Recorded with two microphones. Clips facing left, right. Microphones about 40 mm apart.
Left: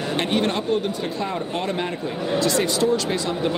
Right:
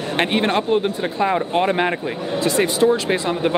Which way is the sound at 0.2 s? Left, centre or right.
Right.